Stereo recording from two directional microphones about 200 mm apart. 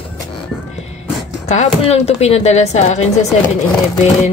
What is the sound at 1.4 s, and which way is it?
Speech, 35° left (ahead or behind).